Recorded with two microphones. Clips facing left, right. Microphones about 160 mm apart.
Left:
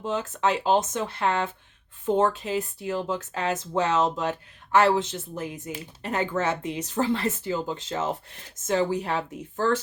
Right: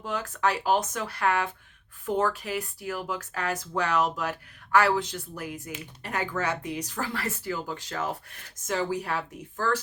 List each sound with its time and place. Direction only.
0.0 s speech: 25° left (ahead or behind)